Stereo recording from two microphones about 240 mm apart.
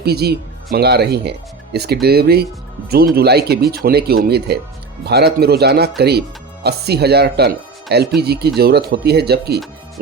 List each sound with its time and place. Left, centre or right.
0.0 s speech: right